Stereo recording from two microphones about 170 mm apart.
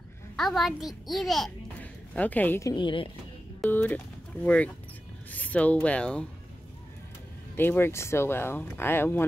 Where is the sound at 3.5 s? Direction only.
10° left (ahead or behind).